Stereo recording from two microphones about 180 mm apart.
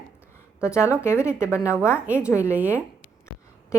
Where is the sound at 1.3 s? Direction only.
5° right (ahead or behind).